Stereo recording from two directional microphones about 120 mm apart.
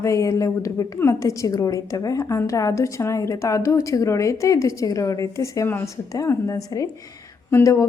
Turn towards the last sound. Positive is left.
turn(degrees=25)  # may be behind; listen again after turning